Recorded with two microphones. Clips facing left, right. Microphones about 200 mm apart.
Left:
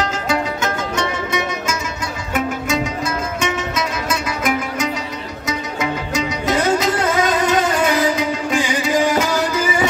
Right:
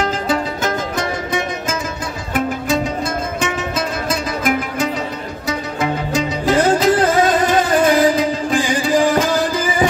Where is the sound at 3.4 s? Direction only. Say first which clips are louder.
Even; 30° right (ahead or behind).